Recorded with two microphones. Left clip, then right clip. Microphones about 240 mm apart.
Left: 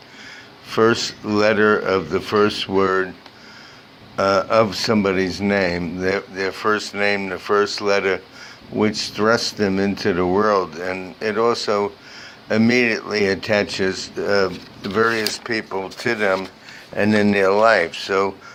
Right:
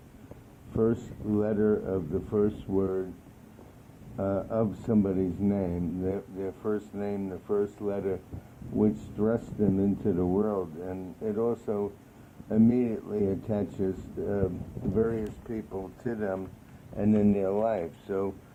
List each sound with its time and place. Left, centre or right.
0.8 s speech: left
4.2 s speech: left
13.1 s speech: left